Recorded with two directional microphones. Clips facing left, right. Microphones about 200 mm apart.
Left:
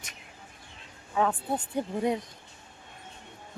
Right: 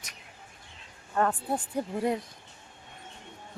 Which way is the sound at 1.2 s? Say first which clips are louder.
Even; centre (ahead or behind).